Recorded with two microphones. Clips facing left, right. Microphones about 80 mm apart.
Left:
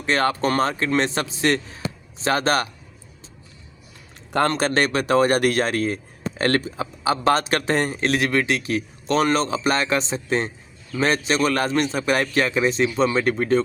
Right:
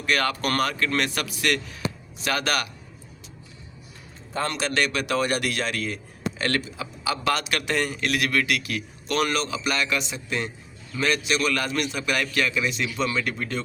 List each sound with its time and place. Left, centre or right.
0.0 s speech: left
4.4 s a man's voice: left